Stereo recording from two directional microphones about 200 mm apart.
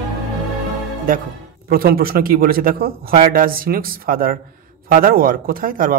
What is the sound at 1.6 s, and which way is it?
A woman's voice, 50° right (ahead or behind).